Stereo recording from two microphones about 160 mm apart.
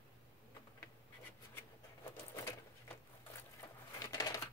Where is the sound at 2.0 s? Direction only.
15° left (ahead or behind).